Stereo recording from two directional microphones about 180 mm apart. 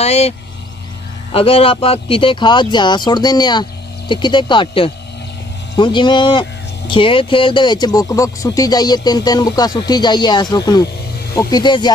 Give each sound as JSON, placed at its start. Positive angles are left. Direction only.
{"t": 0.0, "sound": "speech", "side_deg": 35}
{"t": 1.3, "sound": "speech", "side_deg": 30}